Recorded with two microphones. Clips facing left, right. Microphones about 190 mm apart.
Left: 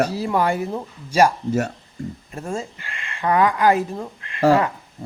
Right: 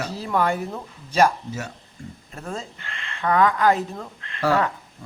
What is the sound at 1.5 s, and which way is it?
Speech, 55° left (ahead or behind).